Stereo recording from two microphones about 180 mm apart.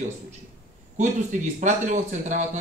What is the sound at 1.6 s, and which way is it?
Speech, 40° right (ahead or behind).